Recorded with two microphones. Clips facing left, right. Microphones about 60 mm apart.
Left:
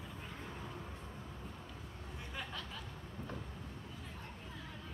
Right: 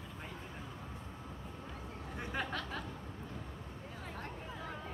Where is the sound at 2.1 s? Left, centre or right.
Right.